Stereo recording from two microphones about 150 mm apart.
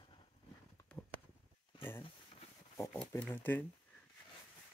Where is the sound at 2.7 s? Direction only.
20° left (ahead or behind).